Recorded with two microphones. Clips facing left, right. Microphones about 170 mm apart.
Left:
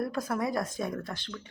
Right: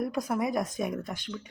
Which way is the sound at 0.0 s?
15° right (ahead or behind).